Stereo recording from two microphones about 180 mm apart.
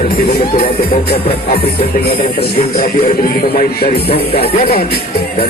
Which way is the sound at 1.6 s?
60° left (ahead or behind).